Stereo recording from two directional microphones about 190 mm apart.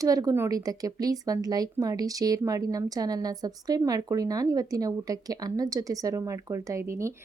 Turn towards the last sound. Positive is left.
turn(degrees=-15)  # may be behind; listen again after turning